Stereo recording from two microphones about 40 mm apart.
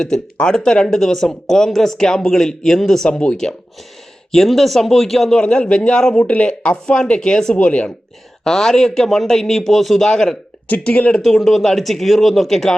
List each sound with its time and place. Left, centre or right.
0.0 s speech: centre
3.1 s a man's voice: left
4.3 s speech: centre
5.4 s a man's voice: left
6.1 s a man's voice: left
7.5 s a man's voice: left
8.4 s speech: centre
10.1 s speech: centre
10.8 s speech: left
11.3 s speech: centre